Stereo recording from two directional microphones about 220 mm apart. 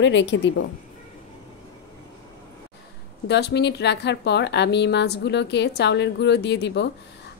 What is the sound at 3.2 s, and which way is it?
A woman's voice, 50° left (ahead or behind).